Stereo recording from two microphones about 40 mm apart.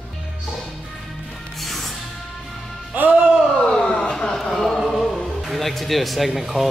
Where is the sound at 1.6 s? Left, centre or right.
Centre.